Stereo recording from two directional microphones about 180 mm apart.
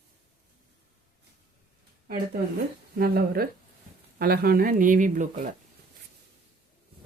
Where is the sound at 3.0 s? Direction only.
55° right (ahead or behind).